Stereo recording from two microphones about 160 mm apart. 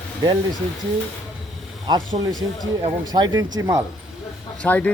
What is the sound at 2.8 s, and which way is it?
Speech, 25° right (ahead or behind).